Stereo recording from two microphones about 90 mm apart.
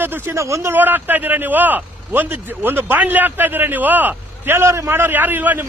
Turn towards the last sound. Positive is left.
turn(degrees=-20)  # may be behind; listen again after turning